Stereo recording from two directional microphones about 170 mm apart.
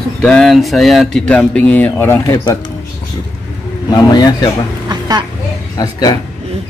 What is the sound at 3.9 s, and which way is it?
Speech, 20° left (ahead or behind).